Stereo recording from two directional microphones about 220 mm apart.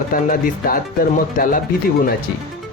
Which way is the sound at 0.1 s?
40° left (ahead or behind).